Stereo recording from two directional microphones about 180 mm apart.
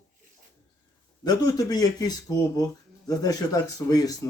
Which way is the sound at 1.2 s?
20° left (ahead or behind).